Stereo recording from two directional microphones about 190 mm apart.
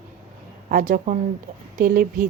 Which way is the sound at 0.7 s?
45° right (ahead or behind).